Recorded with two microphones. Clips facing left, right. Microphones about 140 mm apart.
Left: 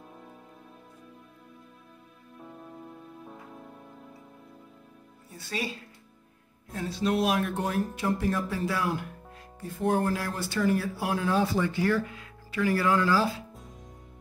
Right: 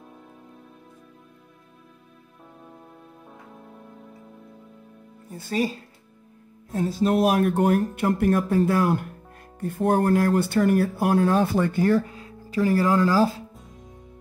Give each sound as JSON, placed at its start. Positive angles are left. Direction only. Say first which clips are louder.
{"t": 5.3, "sound": "speech", "louder": "right 9 dB", "side_deg": -45}
{"t": 7.5, "sound": "speech", "louder": "right 8 dB", "side_deg": -60}
{"t": 13.5, "sound": "music", "louder": "right 1 dB", "side_deg": 0}